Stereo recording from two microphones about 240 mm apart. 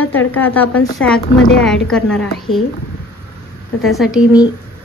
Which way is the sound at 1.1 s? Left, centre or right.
Left.